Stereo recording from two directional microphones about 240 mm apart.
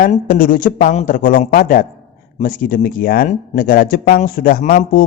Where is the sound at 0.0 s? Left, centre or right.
Left.